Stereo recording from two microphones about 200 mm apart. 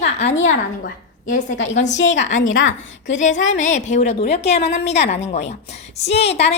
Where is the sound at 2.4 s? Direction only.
75° left (ahead or behind).